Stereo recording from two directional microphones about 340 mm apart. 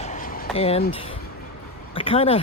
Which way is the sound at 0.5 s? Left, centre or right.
Centre.